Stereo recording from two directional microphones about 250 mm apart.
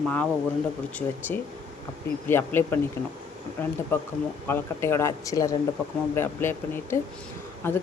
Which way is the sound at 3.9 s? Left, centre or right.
Centre.